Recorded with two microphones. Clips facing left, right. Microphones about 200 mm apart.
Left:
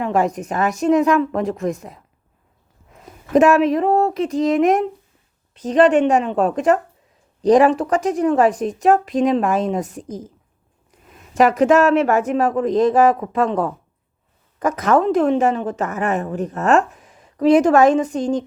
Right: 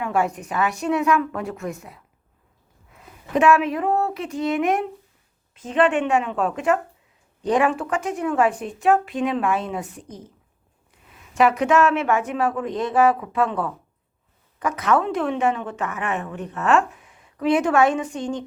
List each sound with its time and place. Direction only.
0.0 s a woman's voice: 35° left (ahead or behind)
2.9 s a woman's voice: 40° left (ahead or behind)
10.1 s a woman's voice: 90° left
11.1 s a woman's voice: 40° left (ahead or behind)